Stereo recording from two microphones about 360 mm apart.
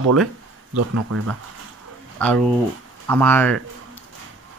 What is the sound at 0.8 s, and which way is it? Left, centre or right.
Speech, right.